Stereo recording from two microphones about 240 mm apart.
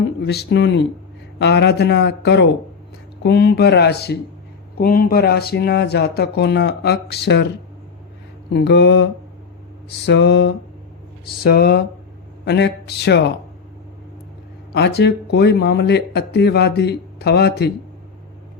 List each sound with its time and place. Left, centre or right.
0.2 s speech: left
8.5 s speech: left
10.1 s speech: left
14.7 s speech: left